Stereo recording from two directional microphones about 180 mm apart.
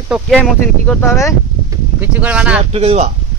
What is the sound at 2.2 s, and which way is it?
Speech, 5° right (ahead or behind).